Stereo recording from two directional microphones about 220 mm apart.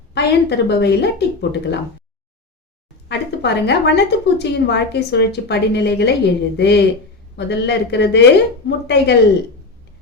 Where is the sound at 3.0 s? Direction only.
50° left (ahead or behind).